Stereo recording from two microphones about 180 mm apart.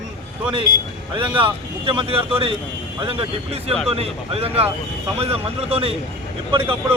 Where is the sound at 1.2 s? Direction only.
25° right (ahead or behind).